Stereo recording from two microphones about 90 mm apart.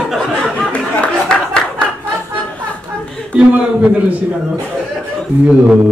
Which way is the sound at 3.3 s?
15° right (ahead or behind).